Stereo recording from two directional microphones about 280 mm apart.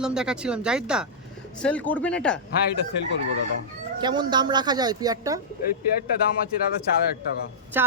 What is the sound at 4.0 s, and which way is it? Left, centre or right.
Speech, centre.